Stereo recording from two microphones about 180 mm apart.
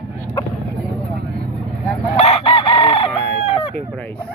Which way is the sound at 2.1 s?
35° left (ahead or behind).